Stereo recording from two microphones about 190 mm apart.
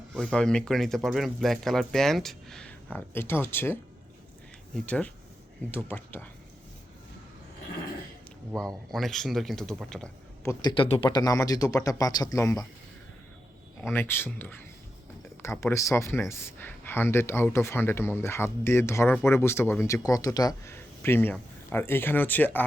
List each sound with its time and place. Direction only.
0.2 s speech: 5° left (ahead or behind)
8.5 s speech: centre (ahead or behind)
10.4 s speech: 20° left (ahead or behind)
13.8 s speech: 10° left (ahead or behind)